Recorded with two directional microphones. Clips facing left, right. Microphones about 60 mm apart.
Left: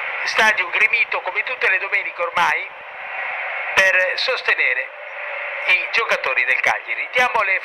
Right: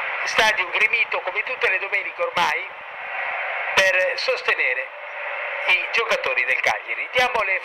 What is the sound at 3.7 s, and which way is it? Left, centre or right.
Speech, left.